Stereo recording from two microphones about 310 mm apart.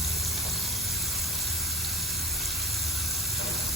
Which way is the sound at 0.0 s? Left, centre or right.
Centre.